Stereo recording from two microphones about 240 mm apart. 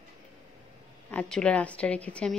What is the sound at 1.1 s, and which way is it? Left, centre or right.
Speech, centre.